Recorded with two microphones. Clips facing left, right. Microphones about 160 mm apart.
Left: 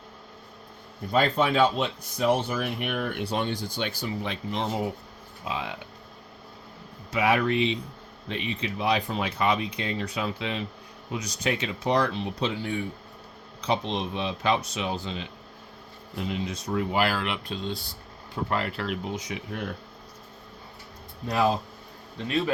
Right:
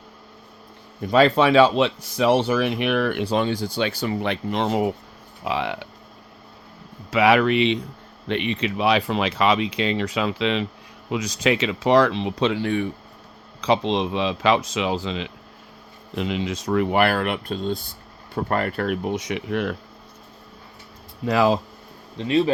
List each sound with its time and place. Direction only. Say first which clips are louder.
1.0 s speech: right 7 dB; 90° right
7.1 s speech: right 6 dB; 90° right
13.6 s speech: right 7 dB; 90° right; by 19.1 s 50° right (ahead or behind)
19.1 s speech: right 8 dB; 80° right
21.2 s speech: right 5 dB; 90° right
22.3 s speech: right 7 dB; 30° right (ahead or behind)